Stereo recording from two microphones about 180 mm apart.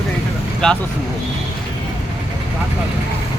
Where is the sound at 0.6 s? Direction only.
5° left (ahead or behind).